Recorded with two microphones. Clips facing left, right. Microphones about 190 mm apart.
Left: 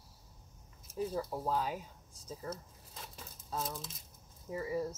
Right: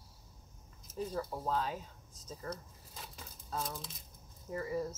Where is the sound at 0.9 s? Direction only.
10° left (ahead or behind).